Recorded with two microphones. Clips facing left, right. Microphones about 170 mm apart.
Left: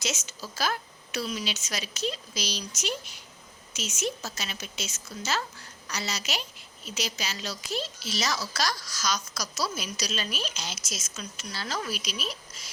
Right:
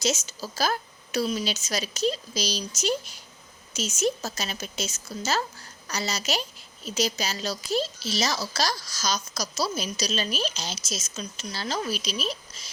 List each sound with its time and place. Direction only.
0.0 s a woman's voice: 35° right (ahead or behind)